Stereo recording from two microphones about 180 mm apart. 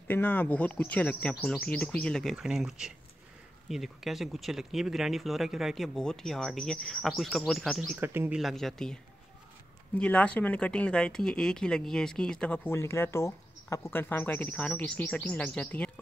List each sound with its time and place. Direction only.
0.1 s speech: 10° left (ahead or behind)
8.0 s speech: 10° right (ahead or behind)
8.4 s speech: centre (ahead or behind)